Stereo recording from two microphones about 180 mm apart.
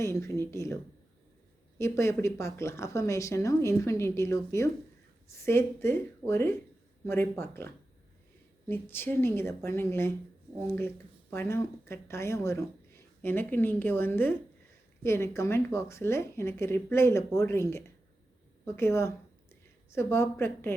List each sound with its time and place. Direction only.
0.0 s a woman's voice: 15° left (ahead or behind)
1.8 s a woman's voice: 15° left (ahead or behind)
8.7 s a woman's voice: 10° left (ahead or behind)